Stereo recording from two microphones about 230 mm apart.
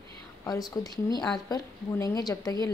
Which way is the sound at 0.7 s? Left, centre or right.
Centre.